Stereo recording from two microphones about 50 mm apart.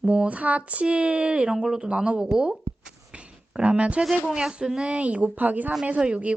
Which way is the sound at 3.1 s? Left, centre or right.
Right.